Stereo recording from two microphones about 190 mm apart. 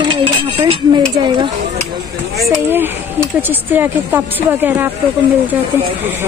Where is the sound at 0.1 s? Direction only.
30° right (ahead or behind).